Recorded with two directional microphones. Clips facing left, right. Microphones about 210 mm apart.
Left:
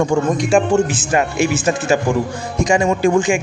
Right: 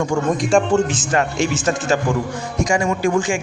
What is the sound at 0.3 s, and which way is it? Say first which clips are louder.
A man's voice: left 1 dB; centre (ahead or behind).